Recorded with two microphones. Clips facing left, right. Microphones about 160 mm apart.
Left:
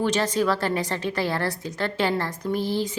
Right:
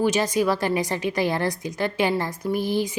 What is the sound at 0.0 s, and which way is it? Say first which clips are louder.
A woman's voice: right 2 dB; 10° right (ahead or behind).